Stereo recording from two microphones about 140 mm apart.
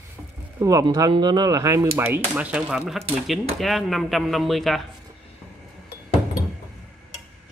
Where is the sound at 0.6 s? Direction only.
25° right (ahead or behind); by 4.8 s centre (ahead or behind).